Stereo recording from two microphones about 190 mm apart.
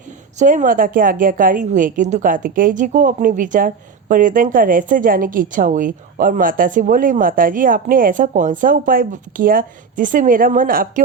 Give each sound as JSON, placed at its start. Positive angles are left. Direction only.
{"t": 0.3, "sound": "a woman's voice", "side_deg": -45}